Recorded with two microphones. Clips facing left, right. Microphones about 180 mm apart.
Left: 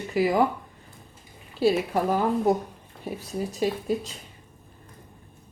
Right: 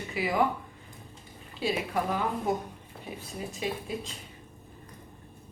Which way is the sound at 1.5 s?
40° left (ahead or behind).